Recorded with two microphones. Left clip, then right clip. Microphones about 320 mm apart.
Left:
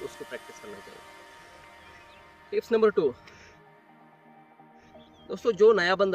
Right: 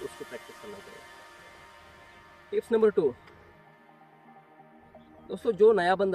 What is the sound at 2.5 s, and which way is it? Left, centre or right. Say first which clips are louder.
Speech: left 1 dB; centre.